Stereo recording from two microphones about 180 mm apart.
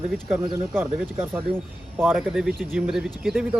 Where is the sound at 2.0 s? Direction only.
10° right (ahead or behind).